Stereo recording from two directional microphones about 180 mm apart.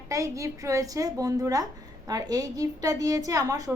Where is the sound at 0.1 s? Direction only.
15° right (ahead or behind).